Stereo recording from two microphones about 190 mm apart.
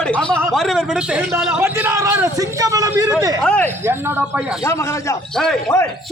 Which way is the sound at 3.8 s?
10° right (ahead or behind).